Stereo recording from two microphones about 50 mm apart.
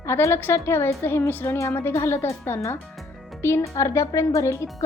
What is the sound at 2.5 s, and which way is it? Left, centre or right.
Speech, left.